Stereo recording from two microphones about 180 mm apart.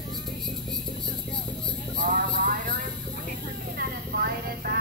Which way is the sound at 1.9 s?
50° right (ahead or behind).